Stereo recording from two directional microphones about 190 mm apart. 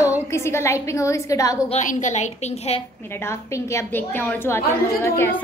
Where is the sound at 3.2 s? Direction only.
15° left (ahead or behind).